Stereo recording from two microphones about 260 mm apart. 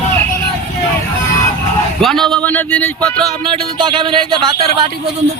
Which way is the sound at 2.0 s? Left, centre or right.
Centre.